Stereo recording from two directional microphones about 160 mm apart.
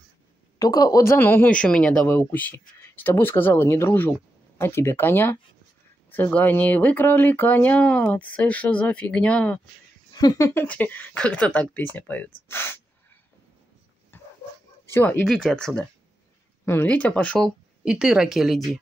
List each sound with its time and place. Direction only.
0.6 s speech: 25° left (ahead or behind); by 9.6 s 10° left (ahead or behind)
10.1 s speech: 20° left (ahead or behind)
14.1 s a sound: 15° left (ahead or behind)
15.0 s speech: 10° left (ahead or behind)
17.8 s speech: 5° right (ahead or behind)